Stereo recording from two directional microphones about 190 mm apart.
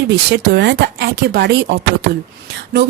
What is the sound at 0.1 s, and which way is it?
Speech, 65° right (ahead or behind).